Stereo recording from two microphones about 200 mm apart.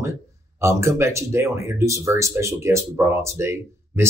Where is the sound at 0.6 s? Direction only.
15° right (ahead or behind).